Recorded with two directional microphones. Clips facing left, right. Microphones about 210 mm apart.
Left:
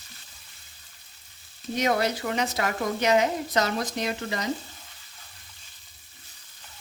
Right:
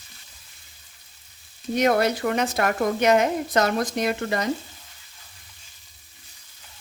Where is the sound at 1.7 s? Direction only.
55° right (ahead or behind).